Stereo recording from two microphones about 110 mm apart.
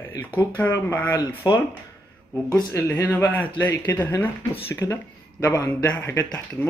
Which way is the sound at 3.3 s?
15° left (ahead or behind).